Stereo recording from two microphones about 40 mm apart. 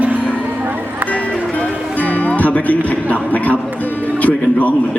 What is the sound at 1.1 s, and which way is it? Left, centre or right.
Music, left.